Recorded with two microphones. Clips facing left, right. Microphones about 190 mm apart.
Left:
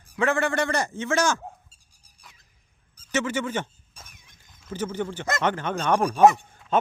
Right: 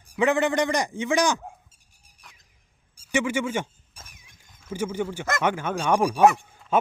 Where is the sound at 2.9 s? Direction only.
10° right (ahead or behind).